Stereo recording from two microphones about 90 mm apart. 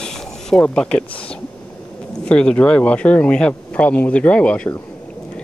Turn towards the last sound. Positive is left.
turn(degrees=15)  # may be behind; listen again after turning